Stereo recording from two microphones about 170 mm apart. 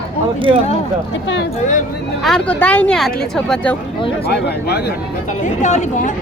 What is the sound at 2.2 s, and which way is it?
Speech, 5° left (ahead or behind).